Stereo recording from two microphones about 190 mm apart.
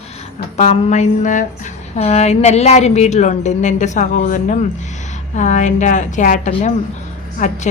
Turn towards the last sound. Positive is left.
turn(degrees=40)  # may be behind; listen again after turning